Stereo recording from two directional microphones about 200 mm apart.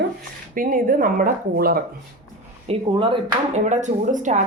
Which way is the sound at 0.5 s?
45° right (ahead or behind).